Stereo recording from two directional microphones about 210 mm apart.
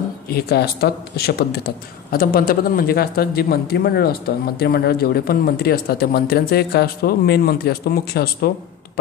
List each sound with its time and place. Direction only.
0.3 s speech: 50° left (ahead or behind)